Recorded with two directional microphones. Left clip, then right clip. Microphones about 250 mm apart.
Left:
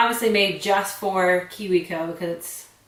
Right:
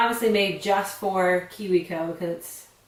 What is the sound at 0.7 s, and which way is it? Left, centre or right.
Speech, centre.